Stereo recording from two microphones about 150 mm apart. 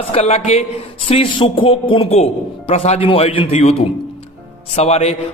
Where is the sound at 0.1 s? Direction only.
45° left (ahead or behind).